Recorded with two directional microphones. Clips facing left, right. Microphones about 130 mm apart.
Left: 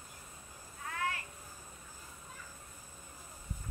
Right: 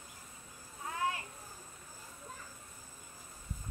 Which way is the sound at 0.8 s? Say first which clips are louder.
Right 2 dB; 20° right (ahead or behind).